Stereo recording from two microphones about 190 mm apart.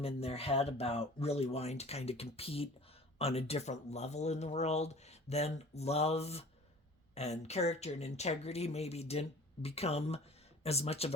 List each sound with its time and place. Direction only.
0.0 s speech: 30° left (ahead or behind)